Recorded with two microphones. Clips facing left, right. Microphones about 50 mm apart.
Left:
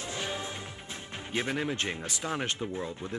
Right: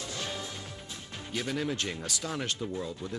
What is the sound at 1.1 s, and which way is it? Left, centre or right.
Speech, left.